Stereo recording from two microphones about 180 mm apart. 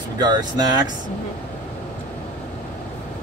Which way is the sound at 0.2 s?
20° right (ahead or behind).